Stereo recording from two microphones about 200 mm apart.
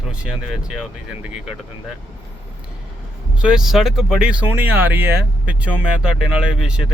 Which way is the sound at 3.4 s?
5° right (ahead or behind).